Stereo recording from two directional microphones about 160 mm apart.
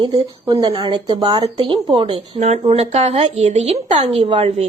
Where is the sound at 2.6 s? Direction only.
40° right (ahead or behind).